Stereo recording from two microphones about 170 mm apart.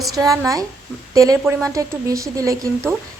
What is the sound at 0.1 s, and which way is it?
A woman's voice, 20° right (ahead or behind).